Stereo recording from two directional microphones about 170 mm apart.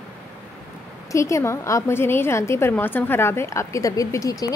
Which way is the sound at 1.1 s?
15° left (ahead or behind).